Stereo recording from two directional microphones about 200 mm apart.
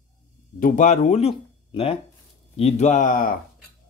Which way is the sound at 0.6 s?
40° left (ahead or behind).